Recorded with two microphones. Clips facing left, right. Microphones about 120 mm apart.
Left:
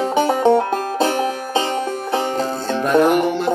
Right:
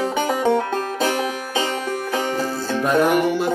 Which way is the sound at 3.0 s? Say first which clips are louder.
Left 3 dB; 50° left (ahead or behind).